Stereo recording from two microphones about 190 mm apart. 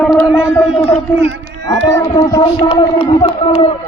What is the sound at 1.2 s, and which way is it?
Speech, 65° right (ahead or behind).